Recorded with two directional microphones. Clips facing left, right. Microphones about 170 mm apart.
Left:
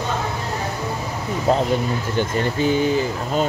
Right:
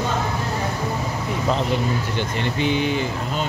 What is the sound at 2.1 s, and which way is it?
Speech, 40° left (ahead or behind).